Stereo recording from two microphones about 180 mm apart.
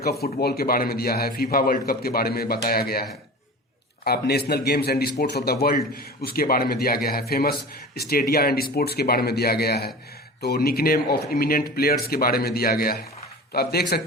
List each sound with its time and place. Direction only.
0.0 s a man's voice: 60° left (ahead or behind)